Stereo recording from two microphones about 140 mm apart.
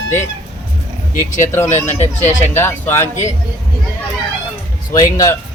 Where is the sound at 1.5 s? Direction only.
15° left (ahead or behind).